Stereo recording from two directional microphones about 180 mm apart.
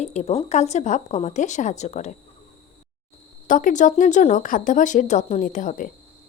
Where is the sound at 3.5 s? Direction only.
45° left (ahead or behind).